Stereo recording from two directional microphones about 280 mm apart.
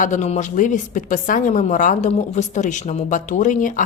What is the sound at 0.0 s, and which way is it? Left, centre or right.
A woman's voice, left.